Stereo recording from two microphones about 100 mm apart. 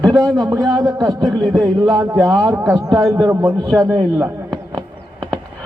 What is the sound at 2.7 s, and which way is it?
Speech, 35° right (ahead or behind).